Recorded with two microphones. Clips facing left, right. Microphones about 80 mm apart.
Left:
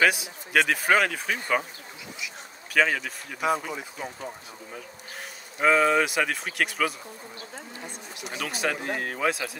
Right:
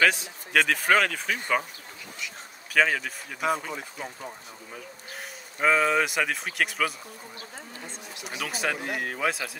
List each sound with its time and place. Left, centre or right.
0.0 s speech: centre
5.6 s speech: centre
8.3 s speech: centre